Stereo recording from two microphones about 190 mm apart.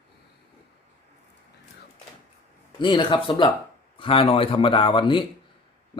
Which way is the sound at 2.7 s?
25° left (ahead or behind).